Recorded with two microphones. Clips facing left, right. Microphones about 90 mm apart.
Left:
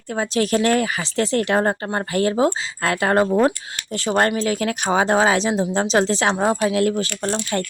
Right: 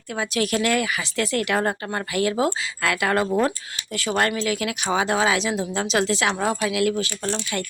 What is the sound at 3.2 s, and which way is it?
Speech, 20° left (ahead or behind).